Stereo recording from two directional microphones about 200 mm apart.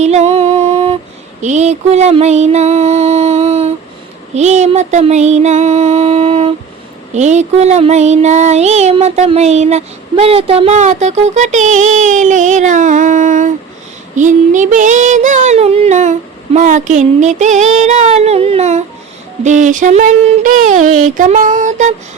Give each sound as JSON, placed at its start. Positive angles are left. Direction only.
{"t": 0.0, "sound": "music", "side_deg": -35}
{"t": 1.4, "sound": "a sound", "side_deg": -35}
{"t": 4.4, "sound": "child singing", "side_deg": -35}